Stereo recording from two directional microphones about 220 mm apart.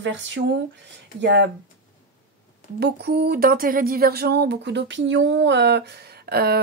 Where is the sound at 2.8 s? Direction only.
45° right (ahead or behind).